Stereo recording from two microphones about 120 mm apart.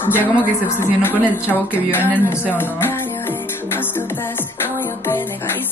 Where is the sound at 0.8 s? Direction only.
20° left (ahead or behind).